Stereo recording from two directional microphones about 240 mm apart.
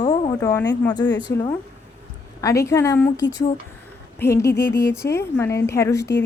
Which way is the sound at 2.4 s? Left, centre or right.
Centre.